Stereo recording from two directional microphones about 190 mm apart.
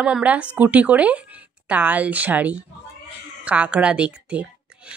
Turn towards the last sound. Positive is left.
turn(degrees=-5)  # may be behind; listen again after turning